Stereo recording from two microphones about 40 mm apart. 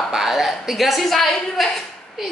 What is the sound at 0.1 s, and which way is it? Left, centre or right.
A woman's voice, centre.